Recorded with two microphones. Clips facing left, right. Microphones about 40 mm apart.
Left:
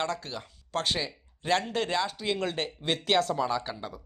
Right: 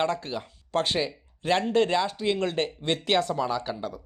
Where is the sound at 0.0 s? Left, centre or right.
Centre.